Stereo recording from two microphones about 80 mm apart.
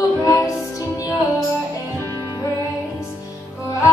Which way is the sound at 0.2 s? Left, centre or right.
Left.